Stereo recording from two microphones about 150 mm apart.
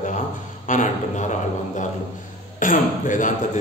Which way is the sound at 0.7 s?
60° left (ahead or behind).